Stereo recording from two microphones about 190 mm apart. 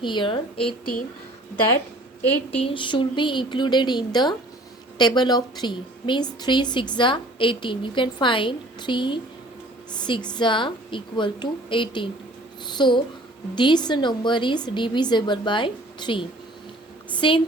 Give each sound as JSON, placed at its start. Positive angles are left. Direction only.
{"t": 0.0, "sound": "a woman's voice", "side_deg": 25}
{"t": 2.2, "sound": "a woman's voice", "side_deg": 10}
{"t": 2.6, "sound": "a woman's voice", "side_deg": 25}